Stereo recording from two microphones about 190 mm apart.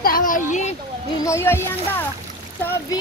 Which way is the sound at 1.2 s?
15° left (ahead or behind).